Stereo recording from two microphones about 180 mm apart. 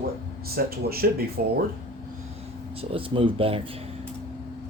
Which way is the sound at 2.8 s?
30° right (ahead or behind).